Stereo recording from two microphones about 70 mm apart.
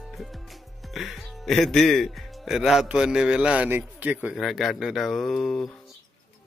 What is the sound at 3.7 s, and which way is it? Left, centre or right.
Speech, right.